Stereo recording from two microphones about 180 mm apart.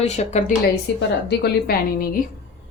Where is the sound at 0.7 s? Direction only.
65° left (ahead or behind).